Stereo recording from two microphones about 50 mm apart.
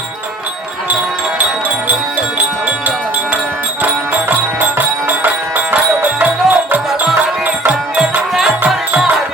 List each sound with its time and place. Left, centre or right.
5.0 s music: right